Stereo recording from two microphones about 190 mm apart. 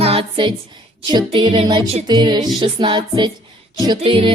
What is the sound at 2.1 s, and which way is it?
Music, 20° right (ahead or behind).